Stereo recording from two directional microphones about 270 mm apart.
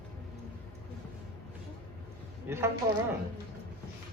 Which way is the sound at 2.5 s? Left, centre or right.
Centre.